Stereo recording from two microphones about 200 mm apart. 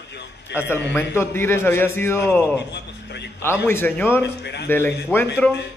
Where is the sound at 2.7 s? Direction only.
60° left (ahead or behind).